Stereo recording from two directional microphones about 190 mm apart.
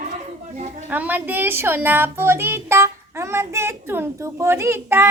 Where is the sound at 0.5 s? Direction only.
40° right (ahead or behind).